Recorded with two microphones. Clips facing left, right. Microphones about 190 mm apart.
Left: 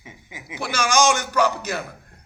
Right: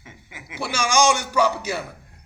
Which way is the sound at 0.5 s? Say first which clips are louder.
Even; 10° right (ahead or behind).